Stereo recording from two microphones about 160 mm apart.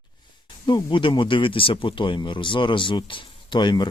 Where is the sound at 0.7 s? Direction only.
30° left (ahead or behind).